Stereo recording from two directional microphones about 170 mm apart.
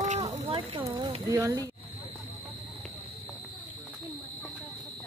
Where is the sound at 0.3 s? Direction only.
40° right (ahead or behind).